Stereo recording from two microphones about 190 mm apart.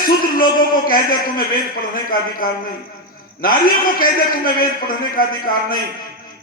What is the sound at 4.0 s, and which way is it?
A man's voice, 50° left (ahead or behind).